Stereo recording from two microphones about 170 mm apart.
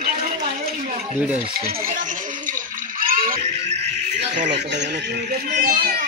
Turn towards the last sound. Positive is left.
turn(degrees=-60)  # may be behind; listen again after turning